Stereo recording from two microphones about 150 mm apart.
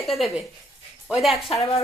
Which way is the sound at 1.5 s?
40° left (ahead or behind).